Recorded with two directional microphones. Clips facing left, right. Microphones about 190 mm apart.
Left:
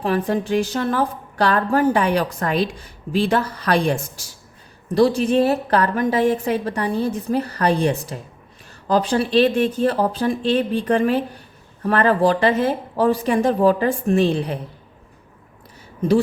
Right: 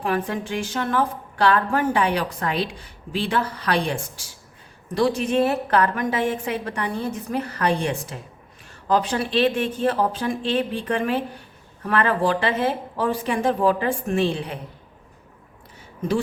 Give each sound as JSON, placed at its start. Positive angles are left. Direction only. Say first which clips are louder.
{"t": 0.0, "sound": "speech", "louder": "left 4 dB", "side_deg": 35}